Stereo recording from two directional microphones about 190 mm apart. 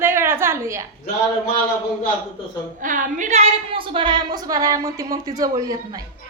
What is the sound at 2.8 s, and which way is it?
A woman's voice, 45° right (ahead or behind).